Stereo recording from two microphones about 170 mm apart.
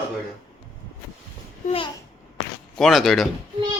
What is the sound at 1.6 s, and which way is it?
Speech, 35° left (ahead or behind).